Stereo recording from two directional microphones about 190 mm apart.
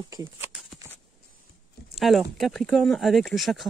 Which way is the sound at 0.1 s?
20° right (ahead or behind).